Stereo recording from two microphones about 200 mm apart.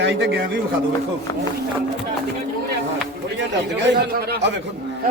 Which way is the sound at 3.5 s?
60° right (ahead or behind).